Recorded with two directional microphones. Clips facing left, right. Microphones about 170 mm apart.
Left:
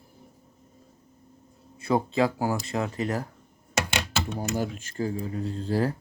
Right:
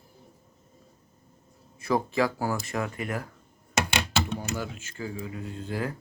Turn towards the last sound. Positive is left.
turn(degrees=35)  # may be behind; listen again after turning